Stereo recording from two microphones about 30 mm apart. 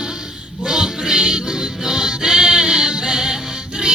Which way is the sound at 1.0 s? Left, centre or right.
Right.